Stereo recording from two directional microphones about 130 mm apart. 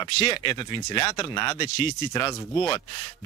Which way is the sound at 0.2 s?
40° left (ahead or behind).